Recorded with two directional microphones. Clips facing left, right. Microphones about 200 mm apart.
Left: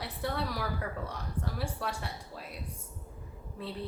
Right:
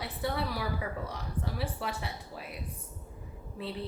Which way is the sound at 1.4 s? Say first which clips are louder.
Even; centre (ahead or behind).